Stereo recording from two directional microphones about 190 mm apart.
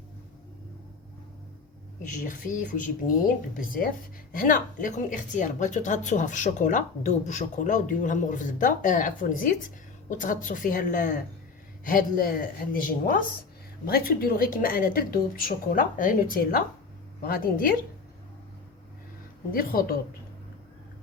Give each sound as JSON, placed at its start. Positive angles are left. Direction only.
{"t": 2.0, "sound": "a woman's voice", "side_deg": 45}
{"t": 19.5, "sound": "a woman's voice", "side_deg": 50}